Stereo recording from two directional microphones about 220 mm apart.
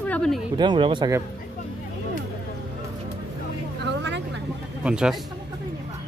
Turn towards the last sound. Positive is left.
turn(degrees=-5)  # may be behind; listen again after turning